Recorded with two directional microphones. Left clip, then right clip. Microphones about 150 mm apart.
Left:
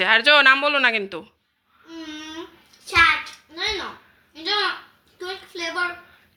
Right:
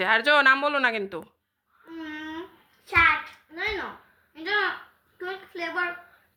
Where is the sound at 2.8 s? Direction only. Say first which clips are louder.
Left 4 dB; 25° right (ahead or behind).